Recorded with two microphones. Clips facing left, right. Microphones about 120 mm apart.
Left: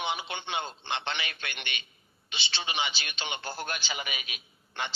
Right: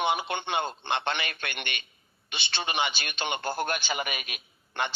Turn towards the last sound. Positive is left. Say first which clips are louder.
# right 5 dB
turn(degrees=-55)  # may be behind; listen again after turning